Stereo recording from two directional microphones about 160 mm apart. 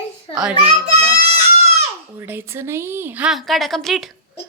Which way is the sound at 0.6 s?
40° right (ahead or behind).